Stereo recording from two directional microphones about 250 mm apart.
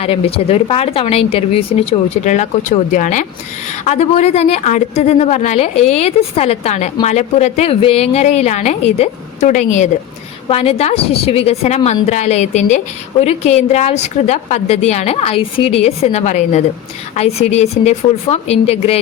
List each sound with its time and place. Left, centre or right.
0.0 s a woman's voice: left